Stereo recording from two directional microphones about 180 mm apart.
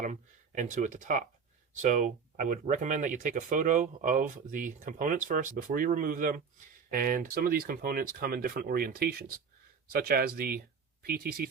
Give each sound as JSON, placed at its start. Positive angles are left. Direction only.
{"t": 0.0, "sound": "speech", "side_deg": -45}